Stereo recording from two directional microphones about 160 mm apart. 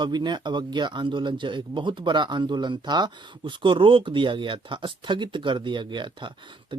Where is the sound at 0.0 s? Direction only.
25° right (ahead or behind).